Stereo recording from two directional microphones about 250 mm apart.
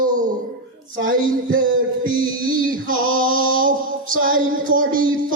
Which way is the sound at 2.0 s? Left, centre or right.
Right.